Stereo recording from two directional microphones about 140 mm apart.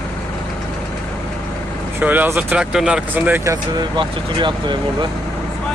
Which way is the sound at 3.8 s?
35° right (ahead or behind).